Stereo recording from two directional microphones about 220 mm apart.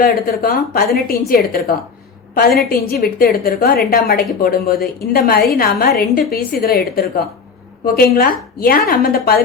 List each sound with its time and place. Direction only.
0.0 s a woman's voice: 40° left (ahead or behind)